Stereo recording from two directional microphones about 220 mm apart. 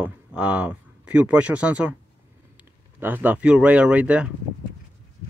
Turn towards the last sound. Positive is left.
turn(degrees=-5)  # may be behind; listen again after turning